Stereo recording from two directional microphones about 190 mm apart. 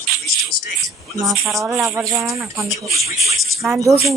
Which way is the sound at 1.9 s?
15° right (ahead or behind).